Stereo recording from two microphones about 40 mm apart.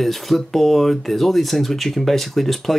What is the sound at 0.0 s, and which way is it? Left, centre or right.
Speech, centre.